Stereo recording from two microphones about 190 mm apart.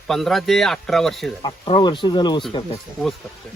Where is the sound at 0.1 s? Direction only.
Centre (ahead or behind).